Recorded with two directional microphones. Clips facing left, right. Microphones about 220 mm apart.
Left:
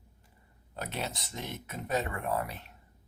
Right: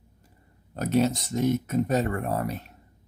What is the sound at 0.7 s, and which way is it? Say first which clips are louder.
Speech: right 14 dB; 45° right (ahead or behind).